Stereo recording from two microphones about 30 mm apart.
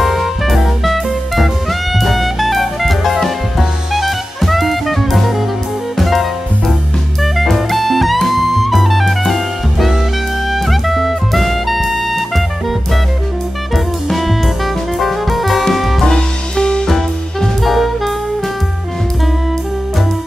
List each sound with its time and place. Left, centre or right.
0.0 s music: centre
3.2 s jazz: centre
5.9 s music: centre
7.3 s music: centre
14.0 s music: centre
16.0 s music: left
16.8 s music: centre
17.6 s music: centre